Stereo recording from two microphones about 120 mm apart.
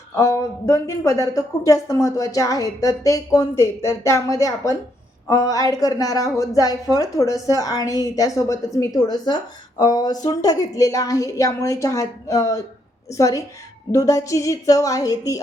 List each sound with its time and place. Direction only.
0.2 s a woman's voice: 25° left (ahead or behind)